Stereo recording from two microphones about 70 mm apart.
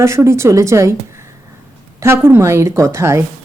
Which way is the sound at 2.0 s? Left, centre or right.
Right.